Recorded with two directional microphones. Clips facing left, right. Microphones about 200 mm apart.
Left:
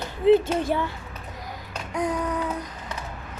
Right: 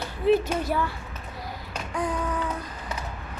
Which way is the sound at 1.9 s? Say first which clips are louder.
Left 3 dB; 20° left (ahead or behind).